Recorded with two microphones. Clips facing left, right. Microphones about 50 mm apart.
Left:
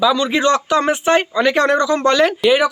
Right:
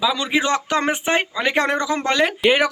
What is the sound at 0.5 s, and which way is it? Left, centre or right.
Speech, right.